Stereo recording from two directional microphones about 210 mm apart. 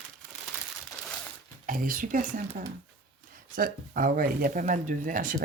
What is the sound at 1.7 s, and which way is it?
Speech, 40° right (ahead or behind).